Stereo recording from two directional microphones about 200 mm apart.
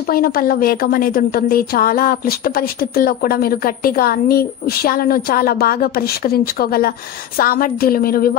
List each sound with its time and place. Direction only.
0.1 s a woman's voice: 45° left (ahead or behind)